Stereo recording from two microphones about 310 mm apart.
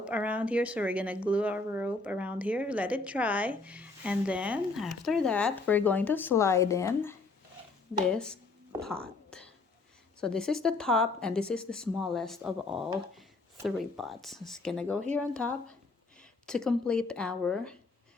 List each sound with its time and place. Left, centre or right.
0.0 s speech: centre
8.9 s whispering: centre
10.2 s speech: centre